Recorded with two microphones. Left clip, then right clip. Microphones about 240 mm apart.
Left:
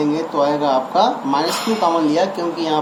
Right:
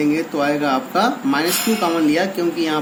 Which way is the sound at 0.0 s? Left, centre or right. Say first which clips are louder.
Left 1 dB; right.